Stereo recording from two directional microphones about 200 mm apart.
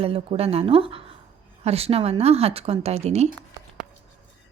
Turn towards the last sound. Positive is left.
turn(degrees=-30)  # may be behind; listen again after turning